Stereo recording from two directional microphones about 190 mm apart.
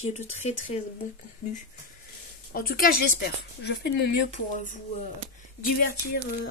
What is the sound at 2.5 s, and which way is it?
Speech, 50° left (ahead or behind).